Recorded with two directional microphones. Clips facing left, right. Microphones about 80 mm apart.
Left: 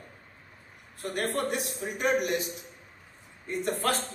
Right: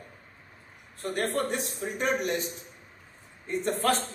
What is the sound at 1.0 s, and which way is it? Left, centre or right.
A man's voice, right.